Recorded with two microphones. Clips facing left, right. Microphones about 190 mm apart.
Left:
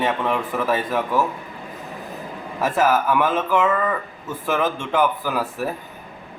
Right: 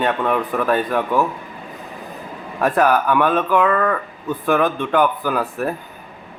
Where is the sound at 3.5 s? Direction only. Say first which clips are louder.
Right 2 dB; 60° right (ahead or behind).